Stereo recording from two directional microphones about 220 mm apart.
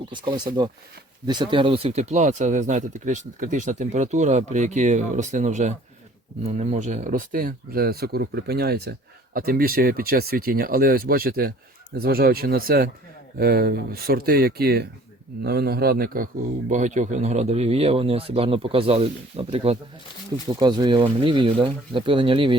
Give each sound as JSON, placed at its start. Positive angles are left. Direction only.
{"t": 0.1, "sound": "a man's voice", "side_deg": -20}